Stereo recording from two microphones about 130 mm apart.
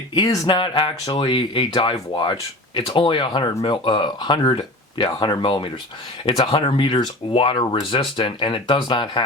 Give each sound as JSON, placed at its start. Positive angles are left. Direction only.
{"t": 0.1, "sound": "speech", "side_deg": 35}